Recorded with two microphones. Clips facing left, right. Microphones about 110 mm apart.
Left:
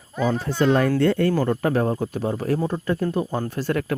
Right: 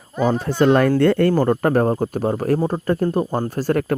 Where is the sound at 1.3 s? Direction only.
45° right (ahead or behind).